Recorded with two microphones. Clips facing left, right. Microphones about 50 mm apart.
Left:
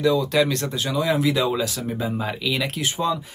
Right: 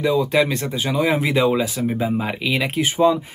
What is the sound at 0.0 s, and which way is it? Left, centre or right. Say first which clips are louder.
Speech: right 1 dB; centre.